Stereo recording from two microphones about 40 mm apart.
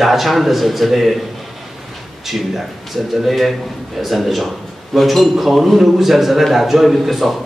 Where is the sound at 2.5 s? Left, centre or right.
Centre.